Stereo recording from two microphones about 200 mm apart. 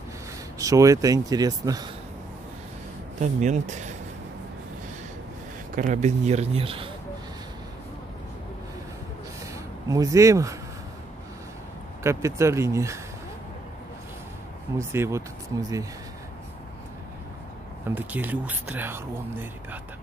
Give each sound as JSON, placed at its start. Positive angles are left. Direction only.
{"t": 0.6, "sound": "speech", "side_deg": -15}
{"t": 3.2, "sound": "speech", "side_deg": -35}
{"t": 5.8, "sound": "speech", "side_deg": -35}
{"t": 9.8, "sound": "speech", "side_deg": -15}
{"t": 12.0, "sound": "speech", "side_deg": -15}
{"t": 14.8, "sound": "speech", "side_deg": -15}
{"t": 17.8, "sound": "speech", "side_deg": -10}